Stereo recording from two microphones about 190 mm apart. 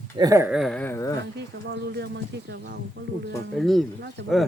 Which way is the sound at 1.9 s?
60° right (ahead or behind).